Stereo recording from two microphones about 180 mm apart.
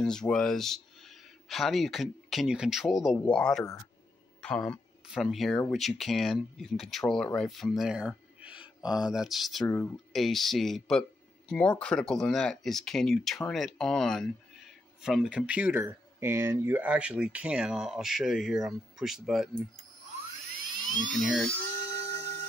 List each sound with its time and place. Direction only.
0.0 s speech: 5° left (ahead or behind)
9.7 s speech: 15° left (ahead or behind)
10.1 s speech: centre (ahead or behind)
21.1 s speech: centre (ahead or behind)
21.9 s a sound: 15° left (ahead or behind)